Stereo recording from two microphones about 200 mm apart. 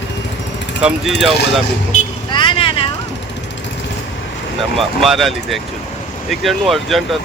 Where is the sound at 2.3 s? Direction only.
25° left (ahead or behind).